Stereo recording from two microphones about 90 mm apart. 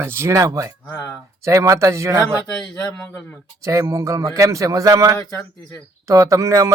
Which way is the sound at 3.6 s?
35° right (ahead or behind).